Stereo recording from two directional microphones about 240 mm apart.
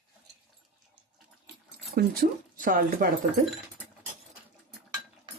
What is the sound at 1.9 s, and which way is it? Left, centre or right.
Speech, right.